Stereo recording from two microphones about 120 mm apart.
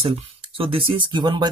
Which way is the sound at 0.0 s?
50° right (ahead or behind).